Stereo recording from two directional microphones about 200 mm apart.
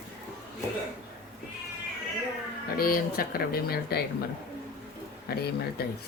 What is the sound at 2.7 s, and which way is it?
Speech, 45° left (ahead or behind).